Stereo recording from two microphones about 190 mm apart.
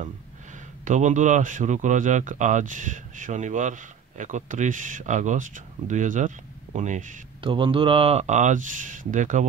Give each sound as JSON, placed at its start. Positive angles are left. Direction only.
{"t": 0.8, "sound": "speech", "side_deg": -40}
{"t": 7.4, "sound": "speech", "side_deg": -25}